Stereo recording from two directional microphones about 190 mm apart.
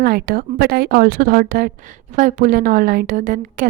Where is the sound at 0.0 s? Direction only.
55° right (ahead or behind).